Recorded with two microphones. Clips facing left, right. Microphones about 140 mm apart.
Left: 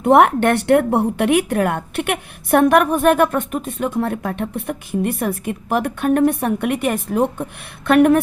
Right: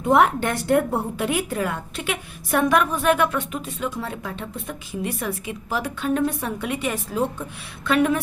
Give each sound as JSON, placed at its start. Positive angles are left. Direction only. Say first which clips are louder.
{"t": 0.0, "sound": "a woman's voice", "louder": "left 6 dB", "side_deg": 65}